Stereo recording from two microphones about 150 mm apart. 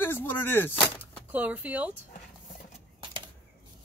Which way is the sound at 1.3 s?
10° right (ahead or behind).